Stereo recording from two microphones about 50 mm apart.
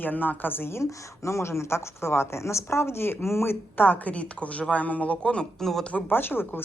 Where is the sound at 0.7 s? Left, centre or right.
Left.